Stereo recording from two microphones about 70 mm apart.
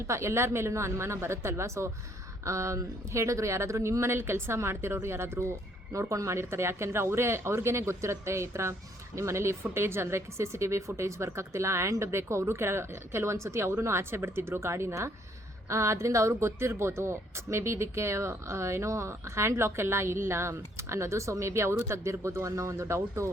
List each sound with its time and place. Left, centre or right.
0.1 s speech: right
5.9 s speech: right